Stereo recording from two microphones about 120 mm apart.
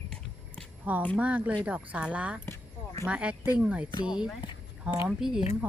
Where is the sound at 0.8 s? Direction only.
15° right (ahead or behind).